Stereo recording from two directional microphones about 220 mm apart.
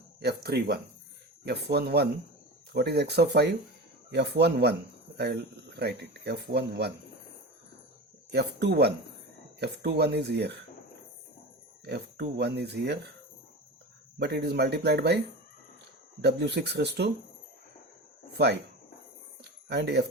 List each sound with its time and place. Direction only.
0.2 s speech: 45° right (ahead or behind)
8.3 s speech: 50° right (ahead or behind)
11.9 s speech: 45° right (ahead or behind)
14.2 s speech: 45° right (ahead or behind)
16.2 s speech: 50° right (ahead or behind)
18.3 s speech: 50° right (ahead or behind)
19.6 s speech: 50° right (ahead or behind)